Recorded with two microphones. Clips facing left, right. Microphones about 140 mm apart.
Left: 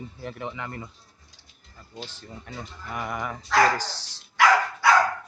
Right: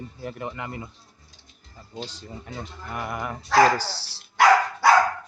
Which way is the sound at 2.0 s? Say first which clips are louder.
Right 3 dB; 15° right (ahead or behind).